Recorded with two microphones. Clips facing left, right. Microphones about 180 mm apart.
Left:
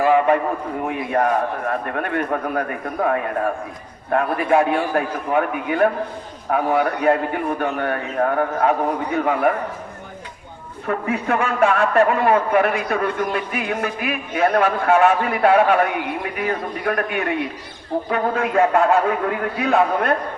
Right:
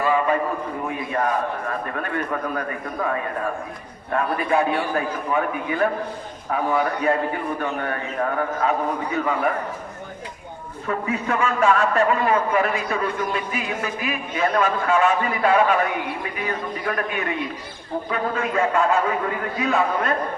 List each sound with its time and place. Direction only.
0.0 s a sound: 60° left (ahead or behind)
0.9 s a man's voice: 60° left (ahead or behind)
10.8 s a man's voice: 55° left (ahead or behind)